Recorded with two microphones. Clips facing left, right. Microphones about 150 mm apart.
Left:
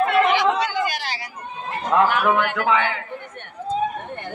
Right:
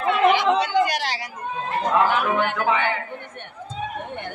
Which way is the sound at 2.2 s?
90° left.